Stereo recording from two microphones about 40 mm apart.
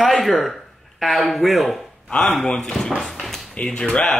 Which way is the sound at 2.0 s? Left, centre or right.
Left.